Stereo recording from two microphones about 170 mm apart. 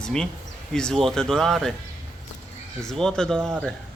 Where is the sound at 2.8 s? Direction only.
5° left (ahead or behind).